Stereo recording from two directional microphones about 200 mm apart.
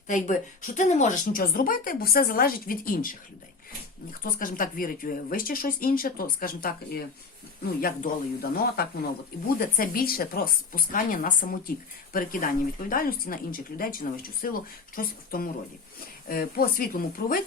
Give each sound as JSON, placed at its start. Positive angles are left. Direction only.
{"t": 0.1, "sound": "a woman's voice", "side_deg": 40}
{"t": 4.2, "sound": "a woman's voice", "side_deg": 45}